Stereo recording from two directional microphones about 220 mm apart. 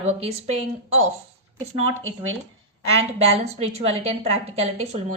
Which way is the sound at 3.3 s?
30° right (ahead or behind).